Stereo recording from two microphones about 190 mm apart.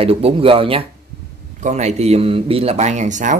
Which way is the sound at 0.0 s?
30° right (ahead or behind).